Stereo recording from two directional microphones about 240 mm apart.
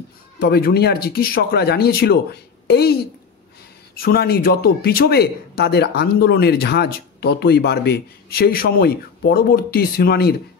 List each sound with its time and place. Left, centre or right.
0.4 s speech: left